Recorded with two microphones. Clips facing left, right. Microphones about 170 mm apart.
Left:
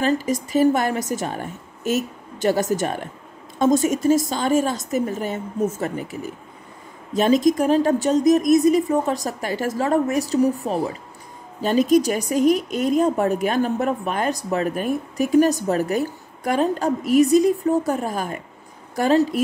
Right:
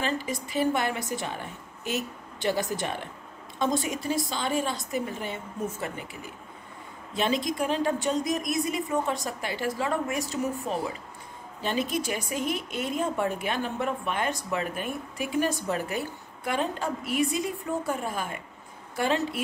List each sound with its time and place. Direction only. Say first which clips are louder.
0.0 s a woman's voice: left 9 dB; 40° left (ahead or behind)